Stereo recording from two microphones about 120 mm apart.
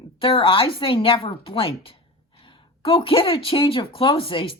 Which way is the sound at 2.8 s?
50° left (ahead or behind).